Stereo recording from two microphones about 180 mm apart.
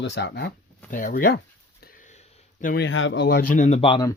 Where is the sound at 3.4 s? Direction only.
50° left (ahead or behind); by 4.1 s 25° left (ahead or behind).